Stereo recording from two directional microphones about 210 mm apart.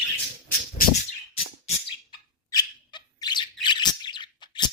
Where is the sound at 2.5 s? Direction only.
20° left (ahead or behind).